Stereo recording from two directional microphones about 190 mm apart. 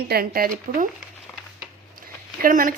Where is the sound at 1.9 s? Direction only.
45° right (ahead or behind).